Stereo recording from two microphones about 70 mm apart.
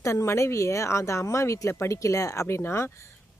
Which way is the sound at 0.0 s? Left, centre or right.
Left.